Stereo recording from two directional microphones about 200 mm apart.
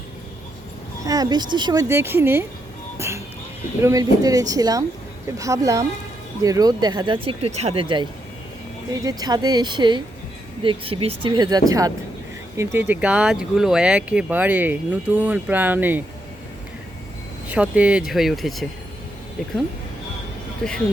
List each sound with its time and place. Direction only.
1.0 s speech: 20° right (ahead or behind)
3.8 s speech: 15° right (ahead or behind)
17.5 s speech: 5° right (ahead or behind)
20.6 s speech: 5° left (ahead or behind)